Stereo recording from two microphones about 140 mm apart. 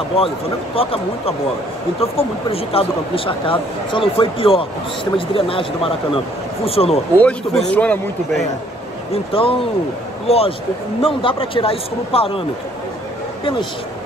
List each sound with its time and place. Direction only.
0.1 s speech: 40° left (ahead or behind)
7.2 s a man's voice: 5° left (ahead or behind)
9.1 s speech: 40° left (ahead or behind)